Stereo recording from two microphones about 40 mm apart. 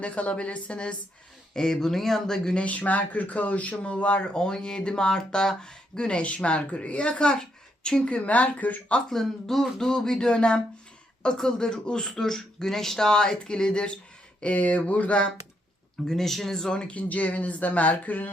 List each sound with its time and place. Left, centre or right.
0.0 s speech: left
1.5 s speech: centre
2.6 s speech: left
9.0 s speech: centre
9.9 s speech: centre
13.1 s speech: centre
14.4 s speech: left
16.0 s speech: centre
16.7 s speech: left